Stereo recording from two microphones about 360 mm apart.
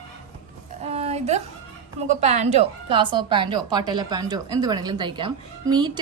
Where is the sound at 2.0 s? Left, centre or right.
Centre.